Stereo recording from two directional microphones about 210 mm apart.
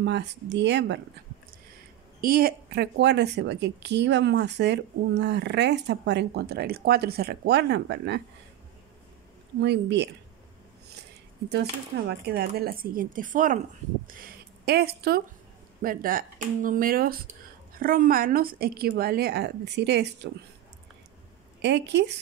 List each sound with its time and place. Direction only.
0.0 s a woman's voice: 55° right (ahead or behind)
2.2 s a woman's voice: 45° right (ahead or behind)
9.6 s a woman's voice: 55° right (ahead or behind)
12.1 s speech: 50° right (ahead or behind)
21.5 s a woman's voice: 55° right (ahead or behind)